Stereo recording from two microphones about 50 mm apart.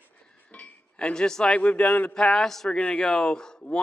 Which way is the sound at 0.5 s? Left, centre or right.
Left.